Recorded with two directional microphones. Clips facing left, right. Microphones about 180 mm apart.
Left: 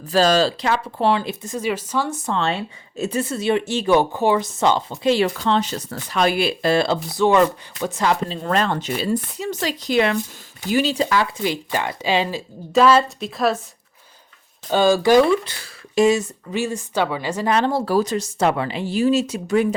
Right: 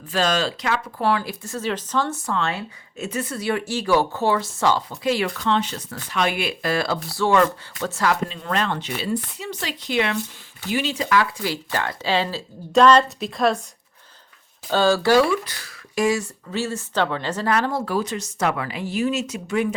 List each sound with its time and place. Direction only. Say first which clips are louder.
0.1 s speech: left 6 dB; 35° left (ahead or behind); by 12.4 s 15° left (ahead or behind)
12.7 s a woman's voice: even; 5° left (ahead or behind)
14.7 s speech: left 3 dB; 15° left (ahead or behind)
17.5 s speech: left 4 dB; 25° left (ahead or behind)